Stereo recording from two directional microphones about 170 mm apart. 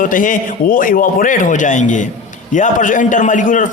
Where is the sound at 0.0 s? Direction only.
50° left (ahead or behind).